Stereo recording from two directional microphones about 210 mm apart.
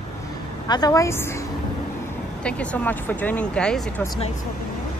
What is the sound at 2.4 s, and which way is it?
Speech, 5° left (ahead or behind).